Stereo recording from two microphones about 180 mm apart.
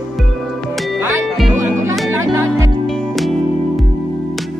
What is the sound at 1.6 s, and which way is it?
Music, 15° right (ahead or behind).